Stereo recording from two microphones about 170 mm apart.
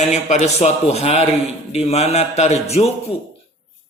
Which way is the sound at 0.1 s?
40° left (ahead or behind).